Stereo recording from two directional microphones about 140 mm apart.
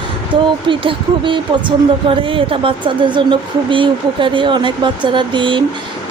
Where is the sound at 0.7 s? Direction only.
35° right (ahead or behind).